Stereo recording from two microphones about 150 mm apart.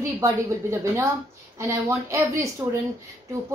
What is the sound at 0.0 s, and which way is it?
A woman's voice, 20° right (ahead or behind).